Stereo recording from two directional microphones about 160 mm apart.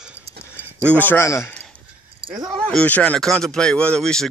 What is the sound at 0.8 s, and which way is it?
Speech, 10° left (ahead or behind).